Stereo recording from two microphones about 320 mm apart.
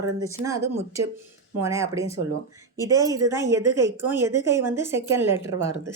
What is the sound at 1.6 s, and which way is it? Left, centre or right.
A woman's voice, centre.